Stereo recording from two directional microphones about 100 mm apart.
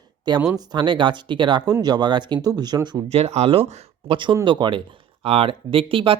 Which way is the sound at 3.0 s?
90° right.